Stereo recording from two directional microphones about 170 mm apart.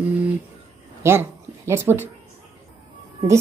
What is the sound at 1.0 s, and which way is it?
Speech, 15° right (ahead or behind).